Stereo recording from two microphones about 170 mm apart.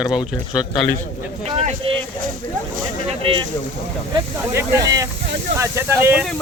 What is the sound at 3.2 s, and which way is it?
Speech, 30° right (ahead or behind).